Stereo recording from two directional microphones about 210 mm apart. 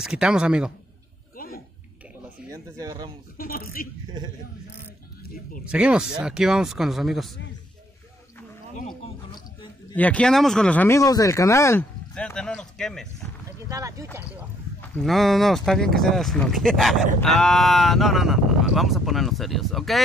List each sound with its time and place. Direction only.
0.0 s speech: 5° right (ahead or behind)
1.3 s a sound: 45° left (ahead or behind)
2.5 s speech: 15° right (ahead or behind)
3.3 s speech: 45° left (ahead or behind)
5.7 s speech: 5° right (ahead or behind)
9.9 s speech: 5° left (ahead or behind)
13.7 s speech: 15° right (ahead or behind)
14.8 s speech: centre (ahead or behind)